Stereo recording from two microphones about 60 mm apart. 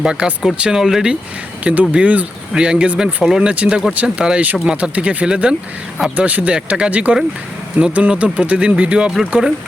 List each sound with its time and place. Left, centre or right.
0.0 s speech: centre
1.6 s speech: right
3.2 s speech: centre
3.5 s speech: right
6.1 s speech: right